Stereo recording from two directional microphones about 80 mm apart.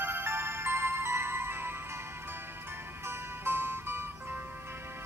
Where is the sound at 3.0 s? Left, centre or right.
Right.